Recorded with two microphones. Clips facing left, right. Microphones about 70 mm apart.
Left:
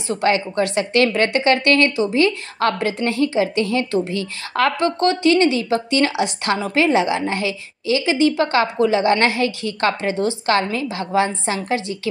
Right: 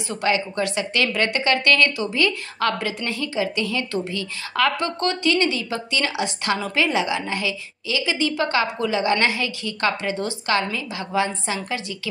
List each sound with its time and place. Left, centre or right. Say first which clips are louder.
0.1 s a woman's voice: left 4 dB; left
10.5 s a woman's voice: left 1 dB; left